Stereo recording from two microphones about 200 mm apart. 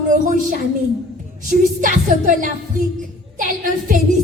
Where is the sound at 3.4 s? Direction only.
40° right (ahead or behind).